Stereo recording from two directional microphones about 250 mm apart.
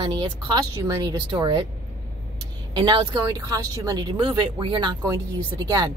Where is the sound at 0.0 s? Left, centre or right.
Centre.